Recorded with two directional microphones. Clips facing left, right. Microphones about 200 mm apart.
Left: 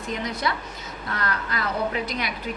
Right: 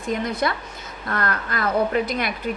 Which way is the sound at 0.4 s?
50° right (ahead or behind).